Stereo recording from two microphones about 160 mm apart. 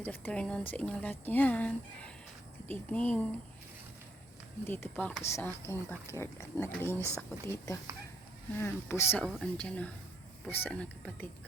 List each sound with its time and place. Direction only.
0.0 s speech: 10° left (ahead or behind)
4.6 s speech: 15° left (ahead or behind)
9.2 s speech: 5° left (ahead or behind)